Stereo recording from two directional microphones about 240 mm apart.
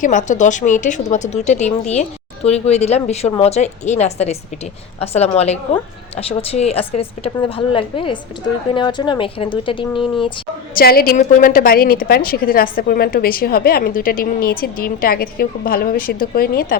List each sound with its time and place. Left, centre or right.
0.0 s a woman's voice: left
10.8 s a woman's voice: left